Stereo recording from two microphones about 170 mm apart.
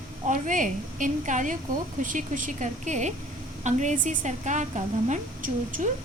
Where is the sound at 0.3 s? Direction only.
50° right (ahead or behind).